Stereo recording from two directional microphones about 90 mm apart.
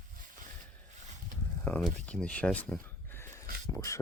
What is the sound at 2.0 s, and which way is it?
Speech, 15° left (ahead or behind).